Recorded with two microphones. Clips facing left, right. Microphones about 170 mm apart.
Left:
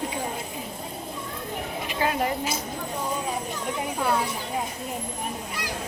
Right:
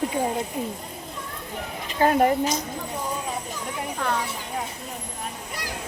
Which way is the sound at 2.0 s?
45° right (ahead or behind).